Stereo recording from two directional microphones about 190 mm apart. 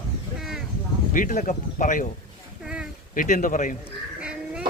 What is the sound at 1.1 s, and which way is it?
Speech, 45° left (ahead or behind).